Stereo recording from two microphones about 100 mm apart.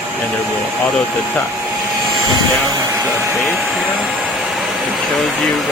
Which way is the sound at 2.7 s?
35° right (ahead or behind).